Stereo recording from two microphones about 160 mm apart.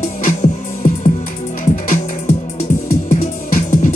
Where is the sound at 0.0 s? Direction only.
50° left (ahead or behind).